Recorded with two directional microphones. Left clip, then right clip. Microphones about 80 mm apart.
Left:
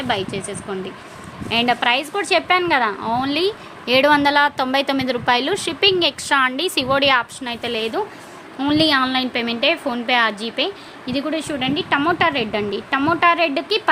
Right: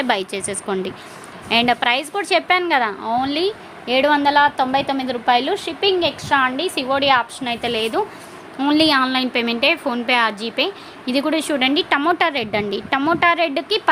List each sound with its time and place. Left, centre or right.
0.1 s speech: right
1.5 s a woman's voice: right
3.0 s a woman's voice: centre
3.8 s a woman's voice: left
5.8 s a woman's voice: left
6.2 s a woman's voice: left
7.0 s a woman's voice: left
7.3 s a woman's voice: centre
7.8 s a woman's voice: centre
11.0 s a woman's voice: right